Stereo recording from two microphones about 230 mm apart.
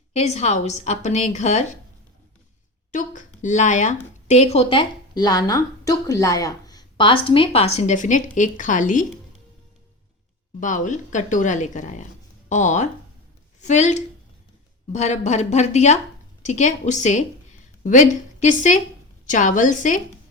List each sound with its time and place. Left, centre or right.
0.1 s speech: left
2.9 s speech: left
10.6 s a woman's voice: left